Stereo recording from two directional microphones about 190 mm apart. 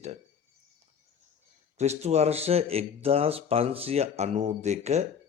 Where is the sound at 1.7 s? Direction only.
35° right (ahead or behind).